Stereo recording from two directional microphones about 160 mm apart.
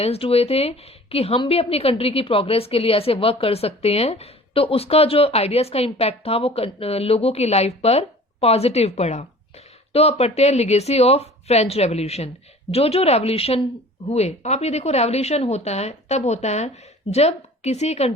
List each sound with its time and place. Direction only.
0.0 s a woman's voice: 40° left (ahead or behind)